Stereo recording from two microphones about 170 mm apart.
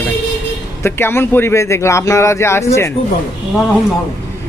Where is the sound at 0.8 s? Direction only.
15° left (ahead or behind).